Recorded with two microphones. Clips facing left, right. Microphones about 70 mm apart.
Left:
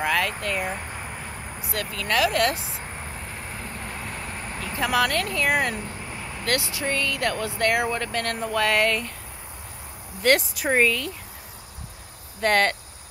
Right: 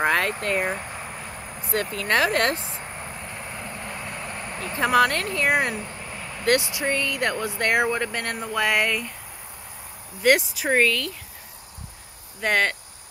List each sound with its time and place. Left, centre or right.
0.0 s speech: right
0.7 s a sound: centre
1.9 s speech: right
2.5 s speech: centre
2.8 s vehicle: centre
4.9 s speech: right
5.8 s a sound: centre
6.4 s speech: right
10.5 s speech: centre
12.4 s speech: centre